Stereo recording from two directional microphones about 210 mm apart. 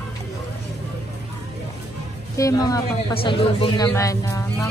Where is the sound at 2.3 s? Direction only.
15° left (ahead or behind).